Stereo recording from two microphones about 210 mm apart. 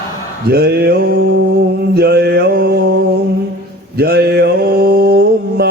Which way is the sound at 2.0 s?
50° right (ahead or behind).